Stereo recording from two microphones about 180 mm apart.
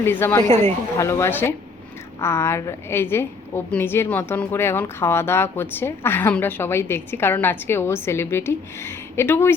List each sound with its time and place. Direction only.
0.0 s a woman's voice: 10° left (ahead or behind)